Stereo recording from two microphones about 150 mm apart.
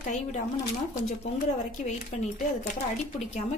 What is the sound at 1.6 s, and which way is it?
Speech, 50° left (ahead or behind).